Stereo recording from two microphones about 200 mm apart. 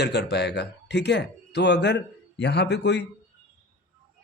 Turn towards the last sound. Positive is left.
turn(degrees=60)  # may be behind; listen again after turning